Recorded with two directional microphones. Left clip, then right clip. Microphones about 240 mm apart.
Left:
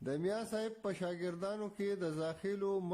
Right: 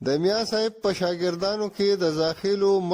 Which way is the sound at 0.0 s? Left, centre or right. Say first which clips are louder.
Right 15 dB; right.